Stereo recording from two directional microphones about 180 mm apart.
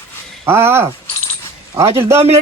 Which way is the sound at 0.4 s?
15° right (ahead or behind).